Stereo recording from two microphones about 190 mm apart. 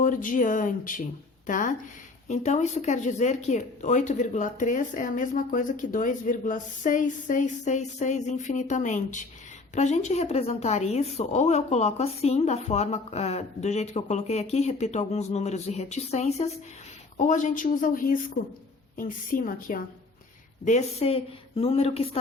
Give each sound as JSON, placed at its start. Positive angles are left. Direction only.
{"t": 0.0, "sound": "speech", "side_deg": 45}
{"t": 20.7, "sound": "speech", "side_deg": 35}